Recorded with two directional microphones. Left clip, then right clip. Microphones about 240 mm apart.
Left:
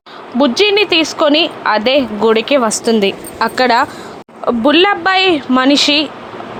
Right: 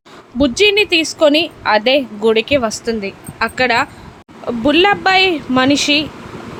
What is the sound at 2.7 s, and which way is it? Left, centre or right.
Speech, centre.